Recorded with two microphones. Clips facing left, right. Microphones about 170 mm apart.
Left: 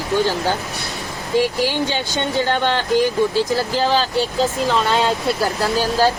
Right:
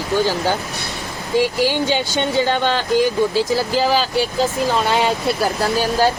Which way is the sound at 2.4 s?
15° right (ahead or behind).